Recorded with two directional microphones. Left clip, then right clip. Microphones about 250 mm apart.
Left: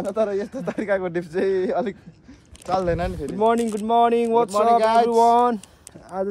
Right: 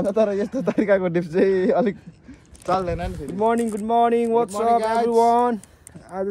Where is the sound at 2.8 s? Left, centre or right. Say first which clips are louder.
Left 3 dB; left.